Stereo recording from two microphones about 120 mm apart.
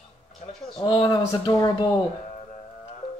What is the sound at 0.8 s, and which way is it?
Speech, 40° left (ahead or behind).